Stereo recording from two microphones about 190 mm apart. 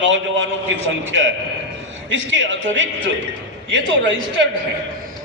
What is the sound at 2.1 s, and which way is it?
A man's voice, 75° right (ahead or behind).